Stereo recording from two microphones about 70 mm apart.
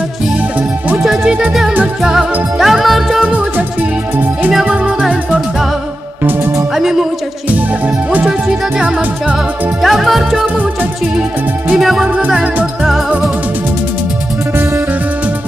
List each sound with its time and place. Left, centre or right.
0.6 s music: right
1.0 s music: centre
4.6 s music: centre
5.0 s music: centre
6.7 s music: centre
7.4 s music: right; by 10.4 s centre
10.6 s music: right
11.7 s music: centre